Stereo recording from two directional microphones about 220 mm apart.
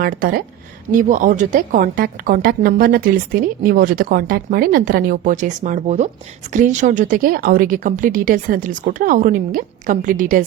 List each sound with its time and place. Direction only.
0.0 s a woman's voice: 40° right (ahead or behind)